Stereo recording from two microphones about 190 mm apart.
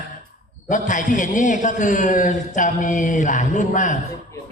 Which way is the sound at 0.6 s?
40° left (ahead or behind).